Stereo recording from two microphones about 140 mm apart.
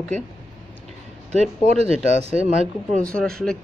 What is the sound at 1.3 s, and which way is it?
Speech, 50° right (ahead or behind).